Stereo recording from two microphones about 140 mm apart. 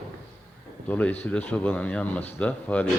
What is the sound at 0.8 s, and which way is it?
Speech, 10° left (ahead or behind).